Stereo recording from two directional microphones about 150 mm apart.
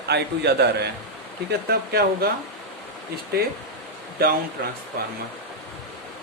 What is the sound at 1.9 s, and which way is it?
Speech, 90° right.